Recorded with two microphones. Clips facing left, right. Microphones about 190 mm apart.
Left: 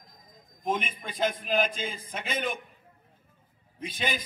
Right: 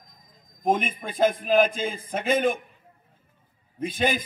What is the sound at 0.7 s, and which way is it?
A man's voice, 50° right (ahead or behind).